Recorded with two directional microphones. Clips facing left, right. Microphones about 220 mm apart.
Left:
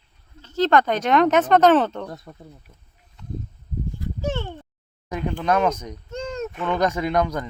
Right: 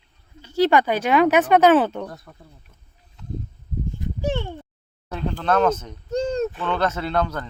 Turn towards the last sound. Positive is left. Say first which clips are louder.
# left 2 dB
turn(degrees=10)  # may be behind; listen again after turning